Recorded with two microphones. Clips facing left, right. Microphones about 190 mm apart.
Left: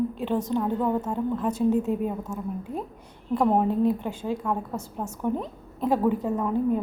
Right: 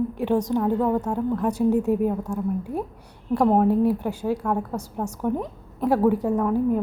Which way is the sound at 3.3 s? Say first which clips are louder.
Right 3 dB; 10° right (ahead or behind).